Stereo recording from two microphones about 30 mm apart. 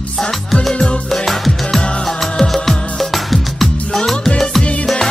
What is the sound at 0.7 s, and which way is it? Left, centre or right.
Music, left.